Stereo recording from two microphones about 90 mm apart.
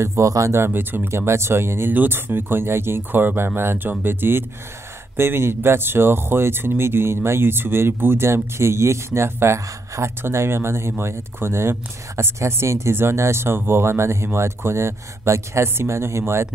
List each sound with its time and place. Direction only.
0.0 s speech: 35° right (ahead or behind)
0.7 s speech: 25° right (ahead or behind)